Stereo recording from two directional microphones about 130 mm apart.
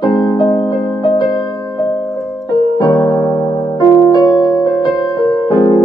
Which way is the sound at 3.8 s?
30° left (ahead or behind).